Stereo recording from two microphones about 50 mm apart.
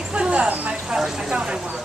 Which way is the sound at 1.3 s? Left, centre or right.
Right.